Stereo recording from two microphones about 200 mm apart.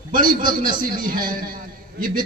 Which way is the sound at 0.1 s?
45° right (ahead or behind).